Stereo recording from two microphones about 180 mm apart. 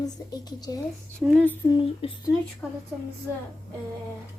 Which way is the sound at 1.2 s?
5° right (ahead or behind).